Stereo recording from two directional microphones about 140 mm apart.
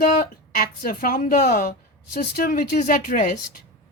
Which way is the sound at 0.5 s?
90° left.